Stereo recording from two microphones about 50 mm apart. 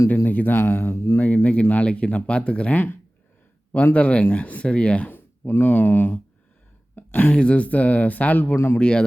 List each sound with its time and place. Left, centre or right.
0.3 s speech: left
0.8 s speech: left
1.2 s a sound: left
1.7 s speech: left
2.7 s speech: left
3.9 s speech: left
5.0 s speech: left
7.3 s speech: left
8.5 s speech: left
8.8 s speech: centre